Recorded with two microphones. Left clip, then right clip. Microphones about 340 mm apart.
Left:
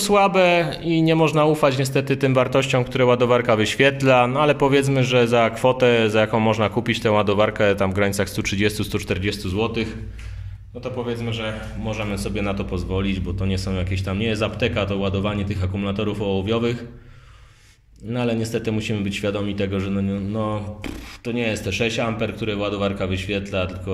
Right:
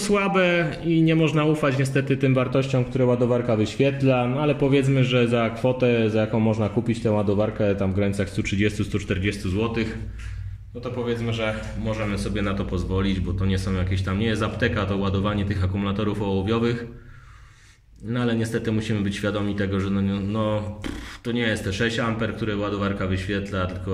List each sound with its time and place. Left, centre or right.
0.0 s a man's voice: centre
11.1 s a man's voice: centre
18.1 s a man's voice: centre